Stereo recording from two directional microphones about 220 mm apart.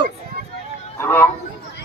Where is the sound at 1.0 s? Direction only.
10° left (ahead or behind).